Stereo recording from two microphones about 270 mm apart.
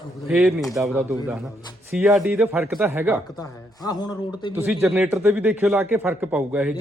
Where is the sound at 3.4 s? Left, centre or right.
Centre.